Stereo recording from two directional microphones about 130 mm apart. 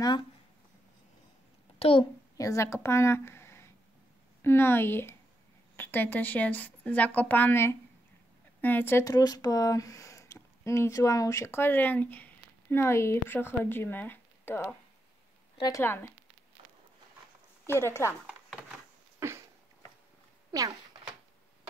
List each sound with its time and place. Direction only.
1.8 s a woman's voice: 45° left (ahead or behind)
2.3 s a woman's voice: 25° left (ahead or behind)
9.1 s speech: 30° left (ahead or behind); by 14.8 s 15° left (ahead or behind)
15.8 s a woman's voice: 15° left (ahead or behind)
17.6 s speech: 20° left (ahead or behind)
19.1 s a sound: 20° right (ahead or behind)